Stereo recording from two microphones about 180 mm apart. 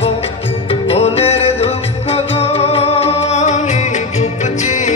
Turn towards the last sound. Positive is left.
turn(degrees=40)  # may be behind; listen again after turning